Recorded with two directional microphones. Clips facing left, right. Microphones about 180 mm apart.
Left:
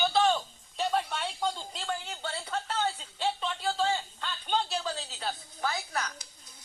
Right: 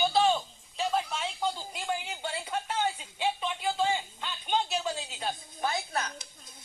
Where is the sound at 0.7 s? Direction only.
Centre (ahead or behind); by 6.1 s 25° right (ahead or behind).